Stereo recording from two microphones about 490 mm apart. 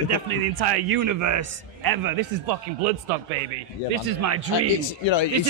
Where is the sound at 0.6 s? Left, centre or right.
Right.